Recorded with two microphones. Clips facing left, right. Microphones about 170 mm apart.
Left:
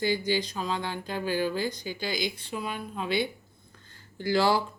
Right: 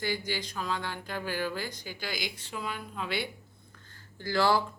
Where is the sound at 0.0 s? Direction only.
20° left (ahead or behind).